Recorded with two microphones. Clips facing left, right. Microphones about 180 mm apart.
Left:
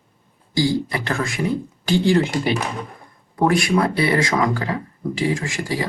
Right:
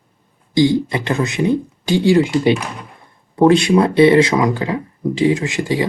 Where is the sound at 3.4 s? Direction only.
25° right (ahead or behind).